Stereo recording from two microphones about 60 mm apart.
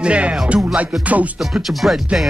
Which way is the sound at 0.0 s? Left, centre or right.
Right.